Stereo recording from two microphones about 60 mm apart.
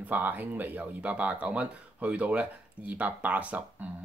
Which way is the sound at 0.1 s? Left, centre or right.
Right.